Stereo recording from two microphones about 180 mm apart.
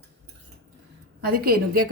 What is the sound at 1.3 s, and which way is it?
Speech, 55° right (ahead or behind).